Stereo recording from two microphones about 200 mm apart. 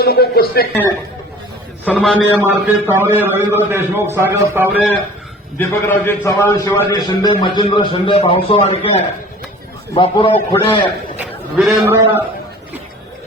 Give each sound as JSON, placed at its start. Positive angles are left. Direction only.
{"t": 0.0, "sound": "speech", "side_deg": 50}
{"t": 1.8, "sound": "a man's voice", "side_deg": 5}
{"t": 2.1, "sound": "a man's voice", "side_deg": -10}
{"t": 5.5, "sound": "a man's voice", "side_deg": 10}
{"t": 11.2, "sound": "a man's voice", "side_deg": -5}